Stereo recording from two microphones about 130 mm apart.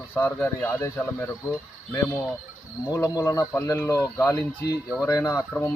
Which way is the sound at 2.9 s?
25° left (ahead or behind).